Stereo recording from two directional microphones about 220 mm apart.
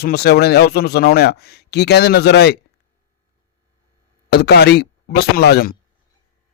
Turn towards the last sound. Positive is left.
turn(degrees=45)  # may be behind; listen again after turning